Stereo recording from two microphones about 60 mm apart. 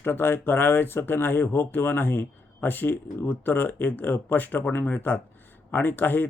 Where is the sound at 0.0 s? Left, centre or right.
Left.